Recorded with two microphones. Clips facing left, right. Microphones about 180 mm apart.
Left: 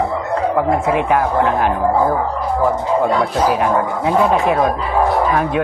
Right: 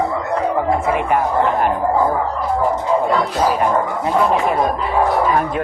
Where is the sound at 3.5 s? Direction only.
90° left.